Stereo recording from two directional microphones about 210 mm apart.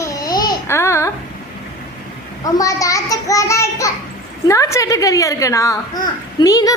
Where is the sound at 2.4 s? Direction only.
15° left (ahead or behind).